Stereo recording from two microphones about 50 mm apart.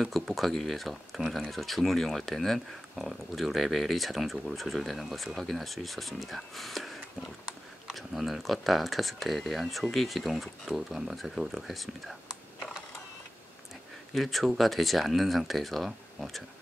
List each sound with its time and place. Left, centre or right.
0.0 s speech: centre
3.0 s speech: centre
14.1 s speech: centre